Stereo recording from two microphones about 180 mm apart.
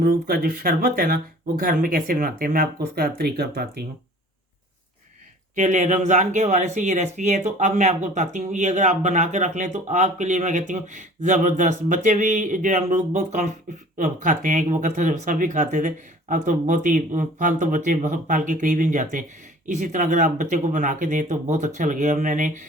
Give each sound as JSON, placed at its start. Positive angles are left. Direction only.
{"t": 0.0, "sound": "speech", "side_deg": -60}
{"t": 5.5, "sound": "speech", "side_deg": -40}